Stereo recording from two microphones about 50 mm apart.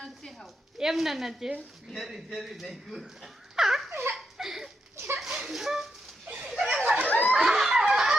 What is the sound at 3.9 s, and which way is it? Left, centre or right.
Giggle, right.